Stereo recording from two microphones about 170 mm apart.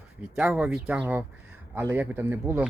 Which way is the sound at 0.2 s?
10° right (ahead or behind).